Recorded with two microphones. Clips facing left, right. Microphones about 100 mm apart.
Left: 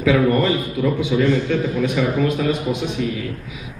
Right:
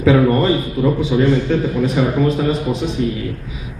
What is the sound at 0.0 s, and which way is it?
A man's voice, 35° right (ahead or behind).